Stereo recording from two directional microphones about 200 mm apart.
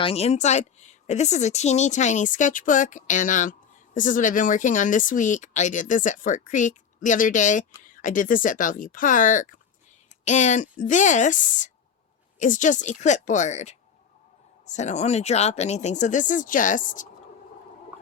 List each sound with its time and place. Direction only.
0.0 s speech: 30° left (ahead or behind)